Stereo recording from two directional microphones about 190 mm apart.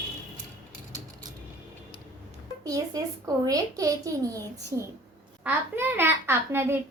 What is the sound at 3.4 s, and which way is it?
A child's voice, 20° right (ahead or behind).